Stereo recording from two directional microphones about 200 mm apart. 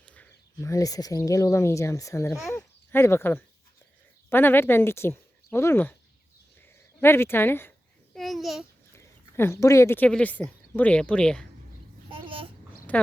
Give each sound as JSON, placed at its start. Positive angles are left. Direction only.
{"t": 0.0, "sound": "speech", "side_deg": 5}
{"t": 7.0, "sound": "speech", "side_deg": 10}
{"t": 8.1, "sound": "babbling", "side_deg": 0}
{"t": 8.9, "sound": "speech", "side_deg": 15}
{"t": 12.1, "sound": "a sound", "side_deg": -25}
{"t": 12.9, "sound": "speech", "side_deg": 5}